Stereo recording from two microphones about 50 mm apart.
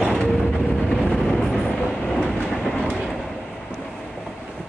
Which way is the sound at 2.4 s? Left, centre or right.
Centre.